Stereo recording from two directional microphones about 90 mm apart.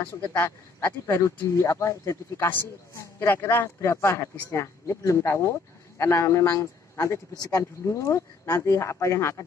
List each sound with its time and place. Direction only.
0.0 s speech: 15° left (ahead or behind)